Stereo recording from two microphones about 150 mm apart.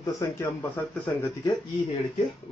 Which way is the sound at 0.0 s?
20° left (ahead or behind).